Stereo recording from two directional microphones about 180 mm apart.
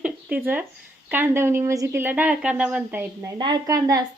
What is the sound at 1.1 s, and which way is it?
A woman's voice, 10° right (ahead or behind).